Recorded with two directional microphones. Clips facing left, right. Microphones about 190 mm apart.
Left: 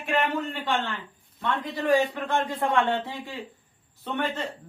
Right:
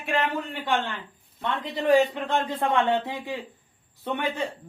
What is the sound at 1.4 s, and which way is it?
A man's voice, 20° right (ahead or behind).